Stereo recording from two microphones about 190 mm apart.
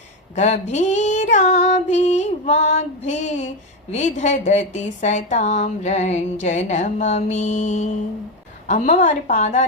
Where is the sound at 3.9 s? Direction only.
40° left (ahead or behind).